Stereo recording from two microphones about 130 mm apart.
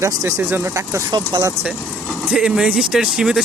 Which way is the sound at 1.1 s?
35° right (ahead or behind).